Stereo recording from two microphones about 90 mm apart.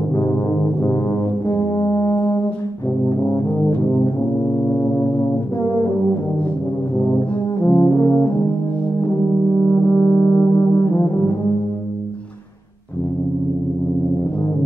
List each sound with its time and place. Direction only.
0.1 s brass instrument: 35° left (ahead or behind)
7.6 s brass instrument: 35° left (ahead or behind)